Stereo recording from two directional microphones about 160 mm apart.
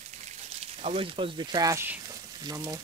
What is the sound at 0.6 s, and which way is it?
Speech, 35° right (ahead or behind).